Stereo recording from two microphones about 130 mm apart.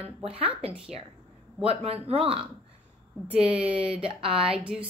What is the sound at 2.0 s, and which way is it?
Speech, 50° right (ahead or behind).